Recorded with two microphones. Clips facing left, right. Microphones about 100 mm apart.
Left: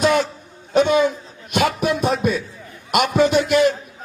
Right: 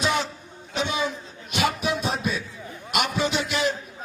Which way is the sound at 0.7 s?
50° left (ahead or behind).